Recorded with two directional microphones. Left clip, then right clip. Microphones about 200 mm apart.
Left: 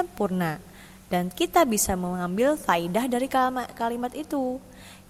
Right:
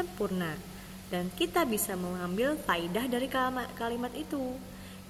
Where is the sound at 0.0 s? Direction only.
45° left (ahead or behind).